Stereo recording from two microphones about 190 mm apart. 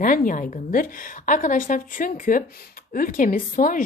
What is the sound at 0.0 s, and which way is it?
A woman's voice, 45° left (ahead or behind).